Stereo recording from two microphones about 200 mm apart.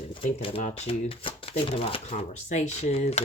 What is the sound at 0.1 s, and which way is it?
Speech, 30° left (ahead or behind).